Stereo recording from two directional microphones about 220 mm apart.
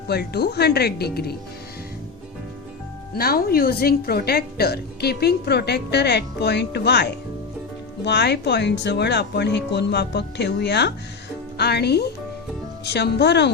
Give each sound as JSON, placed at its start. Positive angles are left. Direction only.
{"t": 0.1, "sound": "a woman's voice", "side_deg": 45}
{"t": 3.2, "sound": "a woman's voice", "side_deg": 45}